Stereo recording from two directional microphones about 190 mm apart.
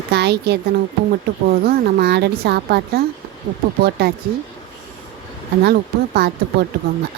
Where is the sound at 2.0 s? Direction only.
60° right (ahead or behind).